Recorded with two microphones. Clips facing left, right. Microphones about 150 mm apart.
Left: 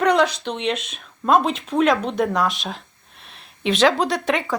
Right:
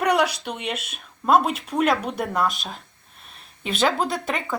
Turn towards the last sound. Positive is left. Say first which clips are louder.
# left 4 dB
turn(degrees=0)  # may be behind; listen again after turning